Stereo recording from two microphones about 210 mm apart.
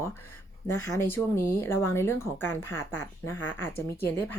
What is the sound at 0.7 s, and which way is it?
Speech, 90° left.